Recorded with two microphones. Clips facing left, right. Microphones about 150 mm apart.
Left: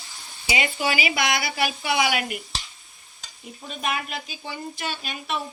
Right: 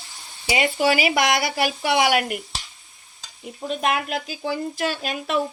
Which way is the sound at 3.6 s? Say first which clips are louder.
Right 6 dB; 85° right.